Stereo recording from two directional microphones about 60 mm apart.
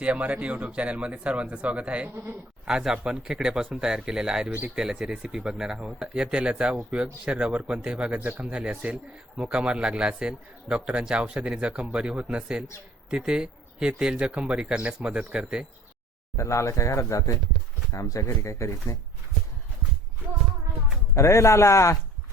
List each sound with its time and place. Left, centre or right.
0.0 s speech: right
16.4 s speech: left
21.2 s speech: left